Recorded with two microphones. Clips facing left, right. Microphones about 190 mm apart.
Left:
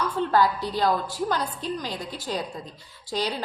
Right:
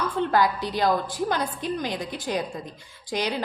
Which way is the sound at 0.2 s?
20° right (ahead or behind).